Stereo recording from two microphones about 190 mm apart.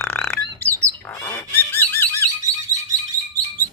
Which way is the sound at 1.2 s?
15° left (ahead or behind).